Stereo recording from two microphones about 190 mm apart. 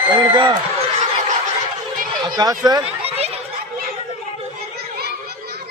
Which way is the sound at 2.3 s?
20° right (ahead or behind).